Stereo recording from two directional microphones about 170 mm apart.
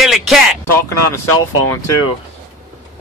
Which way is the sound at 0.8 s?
15° left (ahead or behind).